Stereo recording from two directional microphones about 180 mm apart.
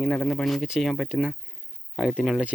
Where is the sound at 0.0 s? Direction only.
5° left (ahead or behind).